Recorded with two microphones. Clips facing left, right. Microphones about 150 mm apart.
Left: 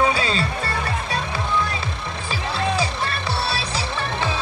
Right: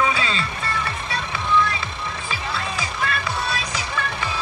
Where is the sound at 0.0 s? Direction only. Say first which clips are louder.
Left 2 dB; 40° left (ahead or behind).